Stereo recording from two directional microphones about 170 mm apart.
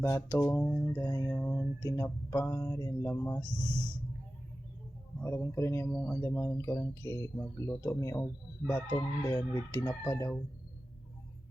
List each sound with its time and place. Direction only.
0.0 s speech: 15° left (ahead or behind)
5.2 s speech: 15° left (ahead or behind)
9.0 s fowl: 20° left (ahead or behind)